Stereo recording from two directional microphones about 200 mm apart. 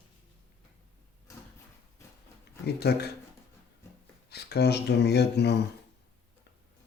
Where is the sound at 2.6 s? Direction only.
55° left (ahead or behind).